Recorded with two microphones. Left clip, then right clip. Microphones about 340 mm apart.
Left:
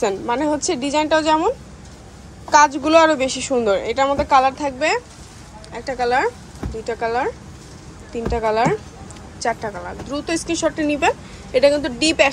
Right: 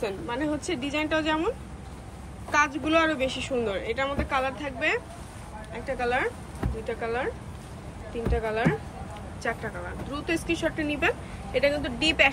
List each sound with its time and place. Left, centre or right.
0.0 s a woman's voice: centre
2.5 s a woman's voice: centre
8.3 s a woman's voice: centre